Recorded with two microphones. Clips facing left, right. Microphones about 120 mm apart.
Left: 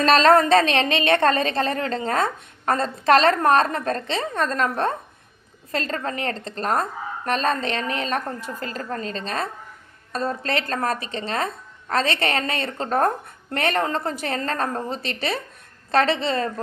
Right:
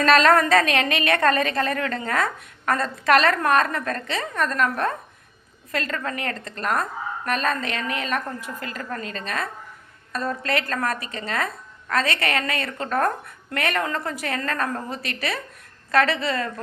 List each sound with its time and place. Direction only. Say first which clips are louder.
0.0 s a woman's voice: left 1 dB; 30° left (ahead or behind)